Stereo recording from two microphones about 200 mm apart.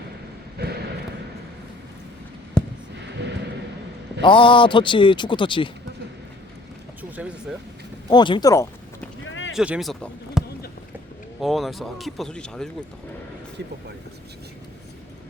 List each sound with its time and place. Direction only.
0.6 s a sound: 55° right (ahead or behind)
2.6 s a sound: 5° left (ahead or behind)
3.0 s music: 60° right (ahead or behind)
4.2 s speech: 25° left (ahead or behind)
7.2 s speech: 5° right (ahead or behind)
8.1 s speech: 20° left (ahead or behind)
9.2 s a sound: 70° left (ahead or behind)
9.5 s basketball bounce: 5° right (ahead or behind)
11.3 s speech: centre (ahead or behind)